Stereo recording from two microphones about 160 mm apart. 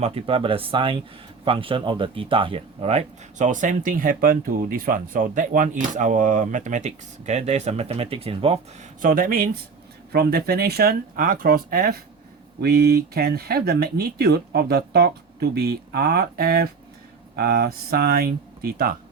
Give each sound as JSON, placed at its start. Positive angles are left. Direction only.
{"t": 0.0, "sound": "speech", "side_deg": -35}
{"t": 9.0, "sound": "speech", "side_deg": -60}
{"t": 10.1, "sound": "speech", "side_deg": -80}
{"t": 12.6, "sound": "speech", "side_deg": -75}